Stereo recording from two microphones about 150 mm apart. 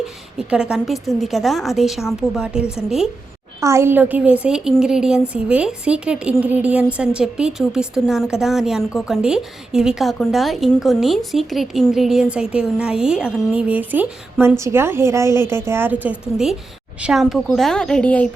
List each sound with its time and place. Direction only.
0.3 s a woman's voice: 5° right (ahead or behind)
3.6 s a woman's voice: 20° right (ahead or behind); by 18.3 s 10° left (ahead or behind)